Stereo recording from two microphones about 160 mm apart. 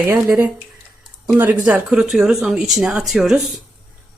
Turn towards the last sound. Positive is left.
turn(degrees=0)  # may be behind; listen again after turning